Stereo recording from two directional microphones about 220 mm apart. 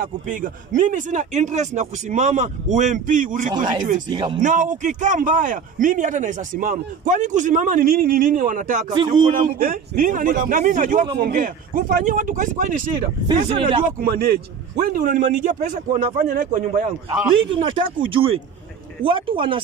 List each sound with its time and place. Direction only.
0.0 s a man's voice: 35° right (ahead or behind)
3.5 s speech: 20° right (ahead or behind)
4.4 s a man's voice: 35° right (ahead or behind)
8.9 s speech: 20° right (ahead or behind)
9.3 s a man's voice: 40° right (ahead or behind)
13.3 s speech: 25° right (ahead or behind)
14.8 s a man's voice: 40° right (ahead or behind)
17.5 s speech: 25° right (ahead or behind)